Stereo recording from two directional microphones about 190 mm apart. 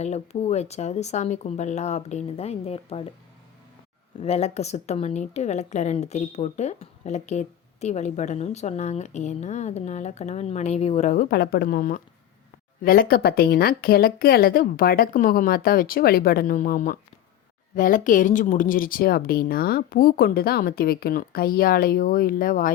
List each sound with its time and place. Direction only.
0.0 s speech: 35° left (ahead or behind)
4.2 s speech: 35° left (ahead or behind)